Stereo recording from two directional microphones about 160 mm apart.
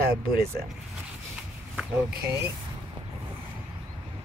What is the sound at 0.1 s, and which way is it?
Speech, 75° right (ahead or behind).